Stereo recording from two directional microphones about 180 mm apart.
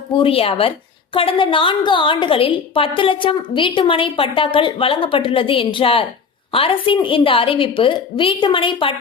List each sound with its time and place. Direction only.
0.2 s a woman's voice: 30° left (ahead or behind)